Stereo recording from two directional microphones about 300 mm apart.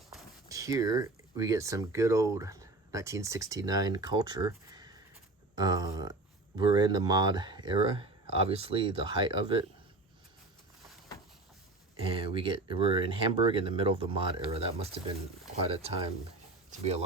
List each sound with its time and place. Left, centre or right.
0.4 s speech: centre
12.1 s speech: centre